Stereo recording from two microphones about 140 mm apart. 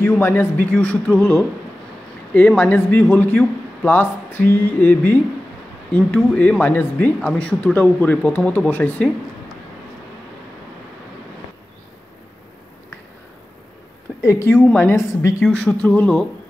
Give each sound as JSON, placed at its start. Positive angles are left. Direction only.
{"t": 0.0, "sound": "a man's voice", "side_deg": 15}
{"t": 14.2, "sound": "a woman's voice", "side_deg": 20}
{"t": 15.4, "sound": "speech", "side_deg": 5}